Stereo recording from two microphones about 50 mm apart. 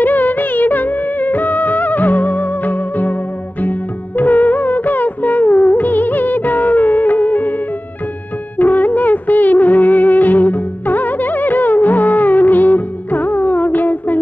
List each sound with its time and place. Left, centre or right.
0.0 s music of bollywood: left
4.2 s music: left
8.5 s music of bollywood: left